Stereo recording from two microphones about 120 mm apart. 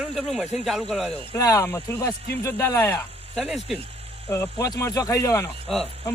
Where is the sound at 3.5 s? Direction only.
5° right (ahead or behind).